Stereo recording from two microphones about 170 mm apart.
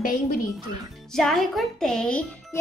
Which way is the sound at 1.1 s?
Centre (ahead or behind).